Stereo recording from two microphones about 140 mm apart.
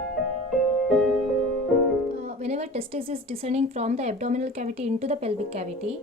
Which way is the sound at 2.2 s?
50° right (ahead or behind).